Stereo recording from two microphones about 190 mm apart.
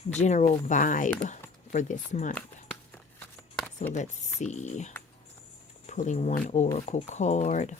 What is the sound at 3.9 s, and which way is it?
Speech, 40° left (ahead or behind).